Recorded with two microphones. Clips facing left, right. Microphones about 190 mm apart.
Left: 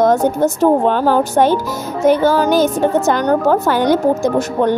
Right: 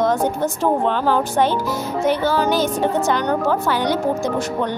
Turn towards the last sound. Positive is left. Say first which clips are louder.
# left 7 dB
turn(degrees=50)  # may be behind; listen again after turning